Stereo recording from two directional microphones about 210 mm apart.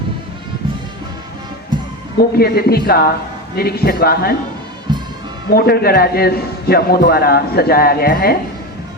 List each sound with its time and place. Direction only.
1.7 s music: 20° right (ahead or behind)
2.4 s a man's voice: 50° left (ahead or behind)
4.9 s music: 20° right (ahead or behind)
5.5 s a man's voice: 50° left (ahead or behind)